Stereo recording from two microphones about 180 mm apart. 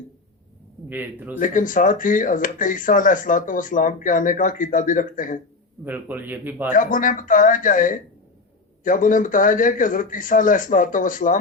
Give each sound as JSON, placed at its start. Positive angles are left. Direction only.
{"t": 0.9, "sound": "a man's voice", "side_deg": -10}
{"t": 1.4, "sound": "speech", "side_deg": 50}
{"t": 5.8, "sound": "a man's voice", "side_deg": -10}
{"t": 6.7, "sound": "speech", "side_deg": 50}